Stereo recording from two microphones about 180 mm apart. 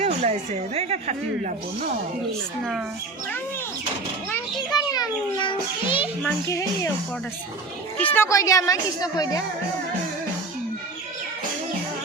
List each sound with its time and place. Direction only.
0.0 s speech: 40° right (ahead or behind)
4.7 s a child's voice: 20° left (ahead or behind)
6.5 s speech: 15° left (ahead or behind)
7.9 s a woman's voice: 10° left (ahead or behind)